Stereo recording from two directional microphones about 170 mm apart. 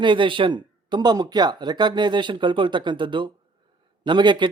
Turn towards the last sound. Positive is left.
turn(degrees=-25)  # may be behind; listen again after turning